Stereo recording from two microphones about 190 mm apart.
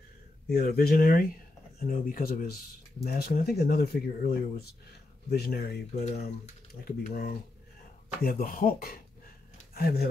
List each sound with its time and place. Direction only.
0.5 s speech: 50° left (ahead or behind)
6.8 s speech: 50° left (ahead or behind)